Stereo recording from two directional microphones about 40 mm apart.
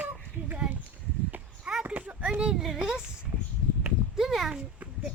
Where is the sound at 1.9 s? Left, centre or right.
Right.